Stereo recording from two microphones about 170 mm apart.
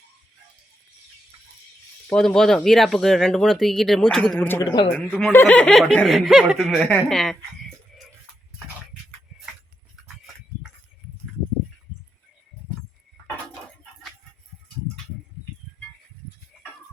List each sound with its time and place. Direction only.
2.0 s speech: 5° left (ahead or behind)
4.6 s speech: 25° left (ahead or behind)
4.9 s speech: 5° left (ahead or behind)